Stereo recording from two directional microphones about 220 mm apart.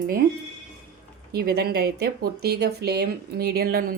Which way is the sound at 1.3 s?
45° right (ahead or behind).